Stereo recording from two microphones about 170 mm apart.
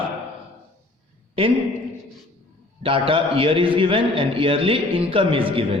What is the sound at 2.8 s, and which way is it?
A man's voice, 30° right (ahead or behind).